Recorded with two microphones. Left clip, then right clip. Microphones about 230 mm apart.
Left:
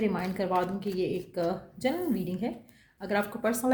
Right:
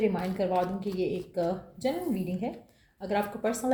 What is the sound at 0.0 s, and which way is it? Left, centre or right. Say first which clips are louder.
Speech: right 2 dB; left.